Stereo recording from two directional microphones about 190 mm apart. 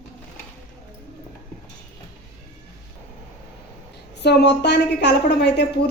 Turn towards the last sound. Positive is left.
turn(degrees=65)  # may be behind; listen again after turning